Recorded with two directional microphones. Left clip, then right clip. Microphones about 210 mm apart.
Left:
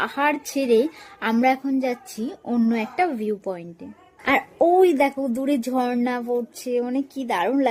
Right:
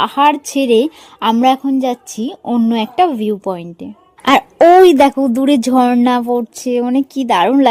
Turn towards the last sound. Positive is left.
turn(degrees=-40)  # may be behind; listen again after turning